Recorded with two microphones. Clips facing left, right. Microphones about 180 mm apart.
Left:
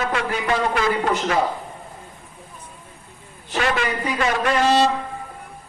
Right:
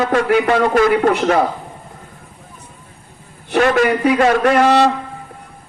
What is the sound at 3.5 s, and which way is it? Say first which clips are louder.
Speech: right 9 dB; 45° right (ahead or behind).